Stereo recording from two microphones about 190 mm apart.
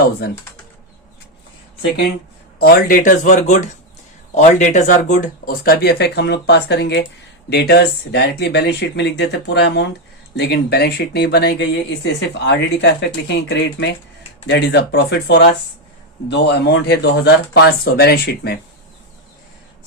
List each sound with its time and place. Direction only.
0.2 s speech: 55° left (ahead or behind)
2.6 s speech: 50° left (ahead or behind)